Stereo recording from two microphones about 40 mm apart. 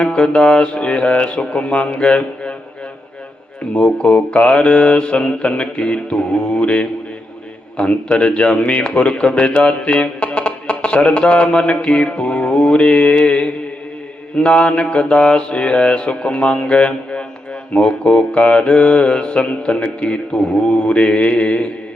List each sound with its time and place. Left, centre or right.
0.0 s a man's voice: left
3.6 s a man's voice: left